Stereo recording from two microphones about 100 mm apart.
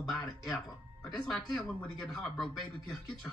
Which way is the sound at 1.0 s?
5° left (ahead or behind).